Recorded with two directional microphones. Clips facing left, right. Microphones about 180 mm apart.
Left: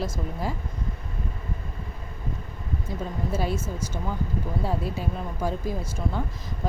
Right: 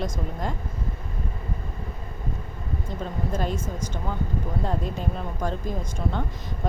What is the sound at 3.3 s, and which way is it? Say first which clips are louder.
Speech: left 1 dB; 10° left (ahead or behind).